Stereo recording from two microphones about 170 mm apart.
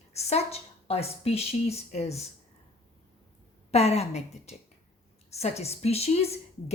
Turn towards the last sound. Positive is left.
turn(degrees=35)  # may be behind; listen again after turning